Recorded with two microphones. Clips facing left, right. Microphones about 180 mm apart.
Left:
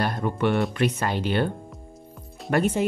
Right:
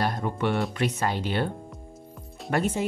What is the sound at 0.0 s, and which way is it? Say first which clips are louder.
Music: left 2 dB; 60° left (ahead or behind).